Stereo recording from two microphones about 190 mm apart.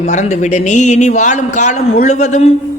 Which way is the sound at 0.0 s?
35° left (ahead or behind).